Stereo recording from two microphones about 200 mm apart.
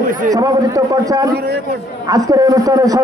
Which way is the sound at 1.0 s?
15° right (ahead or behind).